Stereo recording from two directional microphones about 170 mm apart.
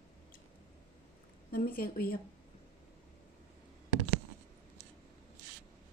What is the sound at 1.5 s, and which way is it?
Speech, 60° left (ahead or behind).